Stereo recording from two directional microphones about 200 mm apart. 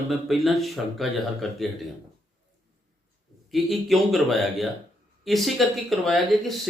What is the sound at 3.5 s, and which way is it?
Speech, centre (ahead or behind).